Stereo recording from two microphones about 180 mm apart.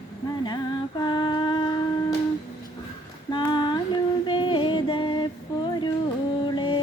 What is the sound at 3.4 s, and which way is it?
Female singing, 25° left (ahead or behind).